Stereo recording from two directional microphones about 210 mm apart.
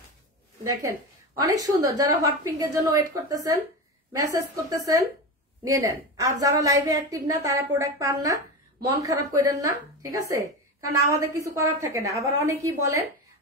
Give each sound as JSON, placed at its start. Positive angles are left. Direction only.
{"t": 0.8, "sound": "a woman's voice", "side_deg": -15}